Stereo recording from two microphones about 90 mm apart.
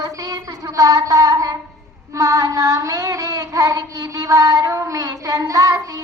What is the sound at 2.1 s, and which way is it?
Child singing, 35° right (ahead or behind).